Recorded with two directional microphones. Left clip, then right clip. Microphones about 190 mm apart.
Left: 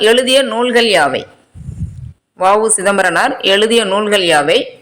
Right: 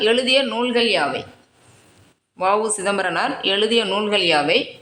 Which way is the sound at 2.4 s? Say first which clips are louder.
Left 8 dB; 20° left (ahead or behind).